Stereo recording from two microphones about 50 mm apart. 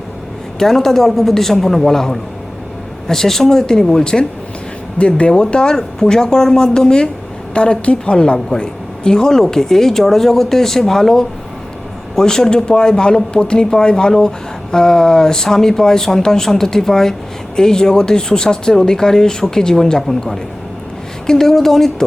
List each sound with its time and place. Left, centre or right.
0.6 s speech: centre